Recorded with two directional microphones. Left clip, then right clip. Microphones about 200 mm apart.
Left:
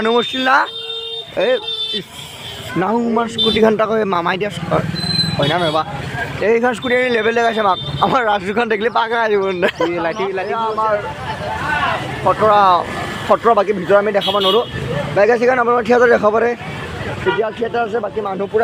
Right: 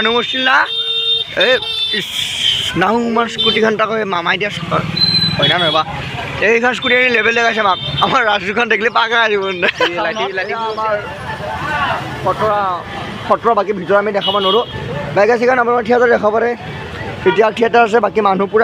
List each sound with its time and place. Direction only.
0.0 s speech: 25° left (ahead or behind)
1.4 s a man's voice: 5° left (ahead or behind)
9.9 s speech: 45° left (ahead or behind)
12.5 s speech: 55° left (ahead or behind)
13.2 s speech: centre (ahead or behind)
17.4 s speech: 30° right (ahead or behind)